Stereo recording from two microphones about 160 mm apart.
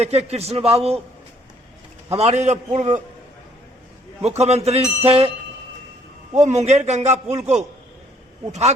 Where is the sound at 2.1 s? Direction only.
45° right (ahead or behind).